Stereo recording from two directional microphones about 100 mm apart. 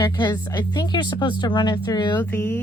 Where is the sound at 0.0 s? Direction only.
45° left (ahead or behind).